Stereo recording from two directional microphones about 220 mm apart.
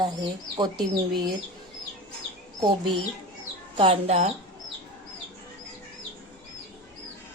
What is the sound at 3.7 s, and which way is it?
Speech, 25° right (ahead or behind).